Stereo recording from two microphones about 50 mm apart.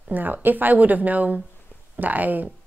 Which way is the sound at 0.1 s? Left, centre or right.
Right.